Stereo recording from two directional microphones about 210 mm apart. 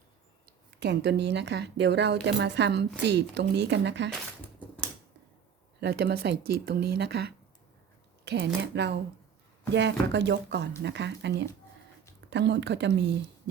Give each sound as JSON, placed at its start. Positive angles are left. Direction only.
{"t": 0.8, "sound": "speech", "side_deg": -50}
{"t": 5.8, "sound": "speech", "side_deg": -50}